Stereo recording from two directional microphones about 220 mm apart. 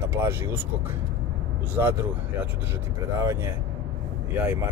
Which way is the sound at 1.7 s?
10° right (ahead or behind).